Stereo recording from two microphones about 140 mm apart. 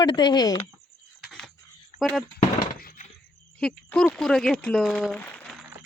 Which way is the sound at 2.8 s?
90° left.